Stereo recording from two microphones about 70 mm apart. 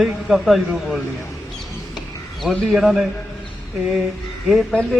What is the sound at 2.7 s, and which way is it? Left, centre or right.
Speech, centre.